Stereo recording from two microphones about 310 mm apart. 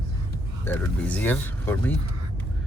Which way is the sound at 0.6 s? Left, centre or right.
Centre.